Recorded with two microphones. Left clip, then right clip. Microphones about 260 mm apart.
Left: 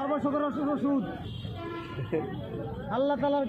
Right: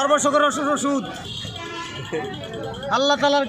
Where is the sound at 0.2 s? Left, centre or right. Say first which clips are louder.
Right 11 dB; right.